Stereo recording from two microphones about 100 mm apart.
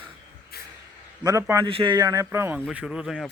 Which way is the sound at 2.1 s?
30° right (ahead or behind).